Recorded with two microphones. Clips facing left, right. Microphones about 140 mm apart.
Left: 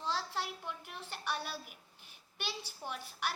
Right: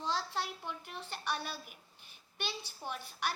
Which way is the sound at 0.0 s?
5° left (ahead or behind).